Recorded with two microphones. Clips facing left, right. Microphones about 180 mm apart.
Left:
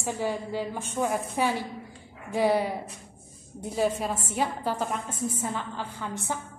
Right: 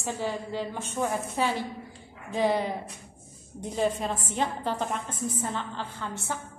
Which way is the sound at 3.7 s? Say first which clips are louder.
Left 1 dB; 5° left (ahead or behind).